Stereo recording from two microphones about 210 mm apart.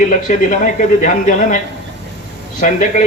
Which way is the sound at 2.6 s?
35° left (ahead or behind).